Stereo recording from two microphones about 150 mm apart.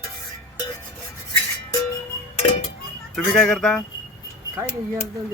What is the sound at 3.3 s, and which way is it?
Speech, 5° left (ahead or behind).